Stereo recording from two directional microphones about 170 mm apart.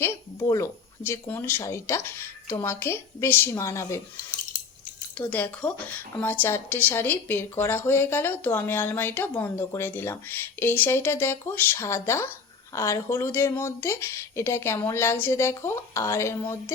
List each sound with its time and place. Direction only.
0.0 s a woman's voice: 15° left (ahead or behind)
5.1 s a woman's voice: 10° left (ahead or behind)